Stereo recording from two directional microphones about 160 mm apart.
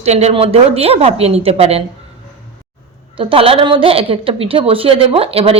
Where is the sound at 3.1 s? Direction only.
35° right (ahead or behind).